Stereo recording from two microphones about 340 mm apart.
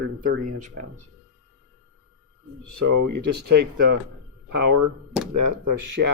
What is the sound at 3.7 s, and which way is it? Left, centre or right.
Speech, right.